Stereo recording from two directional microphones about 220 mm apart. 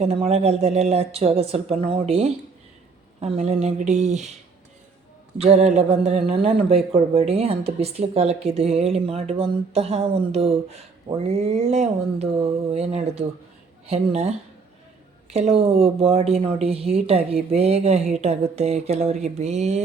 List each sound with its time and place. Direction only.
0.0 s speech: 30° right (ahead or behind)
5.4 s speech: 30° right (ahead or behind)